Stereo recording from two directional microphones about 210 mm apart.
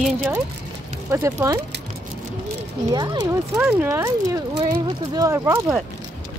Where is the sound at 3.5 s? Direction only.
10° right (ahead or behind).